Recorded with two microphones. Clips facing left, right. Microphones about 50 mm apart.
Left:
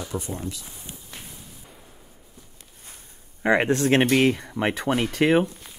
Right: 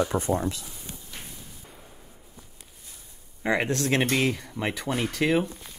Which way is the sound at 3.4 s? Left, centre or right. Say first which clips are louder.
Left 5 dB; left.